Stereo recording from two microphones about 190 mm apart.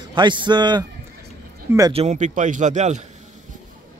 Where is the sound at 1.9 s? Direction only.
35° right (ahead or behind).